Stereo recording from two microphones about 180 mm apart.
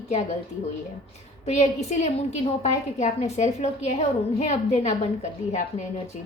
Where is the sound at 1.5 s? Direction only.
40° left (ahead or behind).